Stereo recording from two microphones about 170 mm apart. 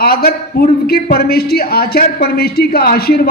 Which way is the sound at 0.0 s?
60° left (ahead or behind).